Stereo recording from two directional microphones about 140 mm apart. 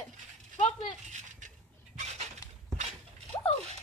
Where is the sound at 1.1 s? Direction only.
60° right (ahead or behind).